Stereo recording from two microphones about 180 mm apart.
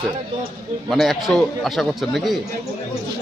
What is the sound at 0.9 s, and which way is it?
Speech, centre (ahead or behind).